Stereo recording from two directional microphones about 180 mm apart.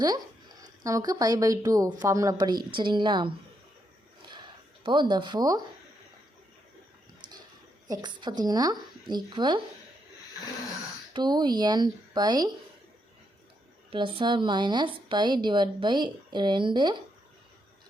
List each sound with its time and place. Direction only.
0.0 s speech: 20° right (ahead or behind)
4.8 s speech: 25° right (ahead or behind)
7.9 s speech: 25° right (ahead or behind)
11.1 s speech: 25° right (ahead or behind)
13.9 s speech: 30° right (ahead or behind)